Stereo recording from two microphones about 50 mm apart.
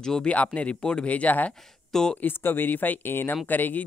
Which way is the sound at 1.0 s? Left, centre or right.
Left.